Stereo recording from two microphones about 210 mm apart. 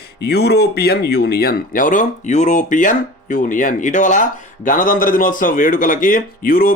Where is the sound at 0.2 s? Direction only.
50° left (ahead or behind).